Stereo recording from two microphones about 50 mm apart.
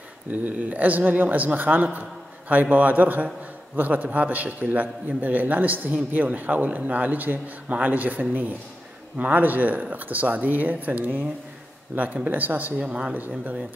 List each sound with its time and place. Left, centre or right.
0.3 s a man's voice: right
12.8 s speech: centre
13.1 s speech: right